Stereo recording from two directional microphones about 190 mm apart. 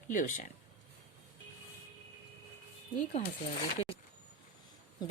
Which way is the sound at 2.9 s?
35° left (ahead or behind).